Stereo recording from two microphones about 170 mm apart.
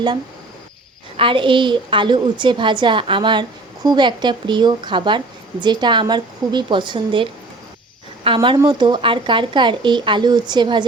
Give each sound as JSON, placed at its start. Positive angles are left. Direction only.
{"t": 1.1, "sound": "speech", "side_deg": -30}